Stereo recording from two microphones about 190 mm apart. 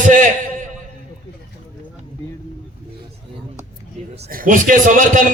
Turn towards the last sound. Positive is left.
turn(degrees=-45)  # may be behind; listen again after turning